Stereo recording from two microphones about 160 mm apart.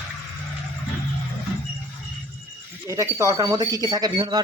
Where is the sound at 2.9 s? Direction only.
20° right (ahead or behind).